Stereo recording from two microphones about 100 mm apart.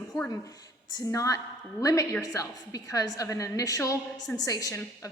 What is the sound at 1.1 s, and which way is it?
A woman's voice, 30° left (ahead or behind).